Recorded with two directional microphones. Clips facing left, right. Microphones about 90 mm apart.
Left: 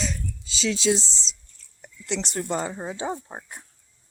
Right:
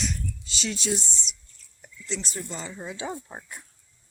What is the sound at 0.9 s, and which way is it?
Speech, 90° left.